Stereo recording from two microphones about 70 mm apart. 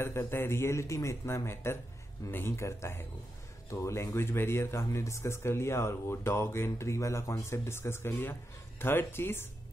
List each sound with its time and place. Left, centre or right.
0.0 s speech: left